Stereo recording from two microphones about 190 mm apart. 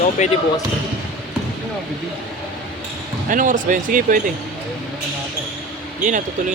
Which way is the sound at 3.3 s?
45° right (ahead or behind).